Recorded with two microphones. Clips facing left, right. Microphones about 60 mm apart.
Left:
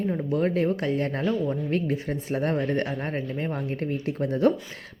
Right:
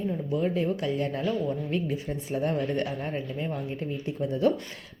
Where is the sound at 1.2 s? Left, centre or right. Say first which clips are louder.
Left 2 dB; left.